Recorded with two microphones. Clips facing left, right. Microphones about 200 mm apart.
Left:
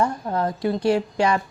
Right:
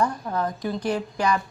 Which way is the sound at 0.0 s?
30° left (ahead or behind).